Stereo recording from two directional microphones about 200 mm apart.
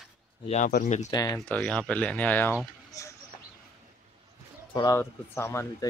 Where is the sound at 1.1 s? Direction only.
20° left (ahead or behind).